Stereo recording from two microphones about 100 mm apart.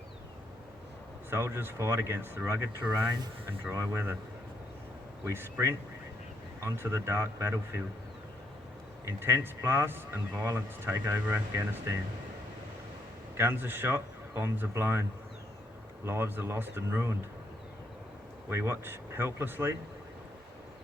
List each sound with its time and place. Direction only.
1.3 s speech: 20° right (ahead or behind)
3.7 s speech: 25° right (ahead or behind)
5.2 s speech: 25° right (ahead or behind)
9.0 s speech: 25° right (ahead or behind)
13.3 s speech: 20° right (ahead or behind)
16.0 s speech: 25° right (ahead or behind)
18.4 s speech: 25° right (ahead or behind)